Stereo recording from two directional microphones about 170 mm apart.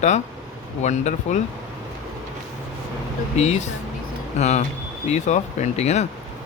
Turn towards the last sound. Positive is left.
turn(degrees=40)  # may be behind; listen again after turning